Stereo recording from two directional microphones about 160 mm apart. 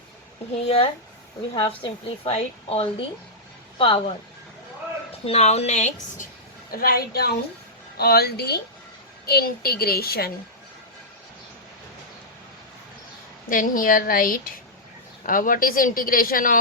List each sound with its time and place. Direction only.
1.5 s a woman's voice: 35° left (ahead or behind)
5.2 s a woman's voice: 40° left (ahead or behind)
6.7 s a woman's voice: 70° left (ahead or behind); by 8.6 s 90° left
9.2 s a woman's voice: 75° left (ahead or behind)
13.5 s a woman's voice: 60° left (ahead or behind)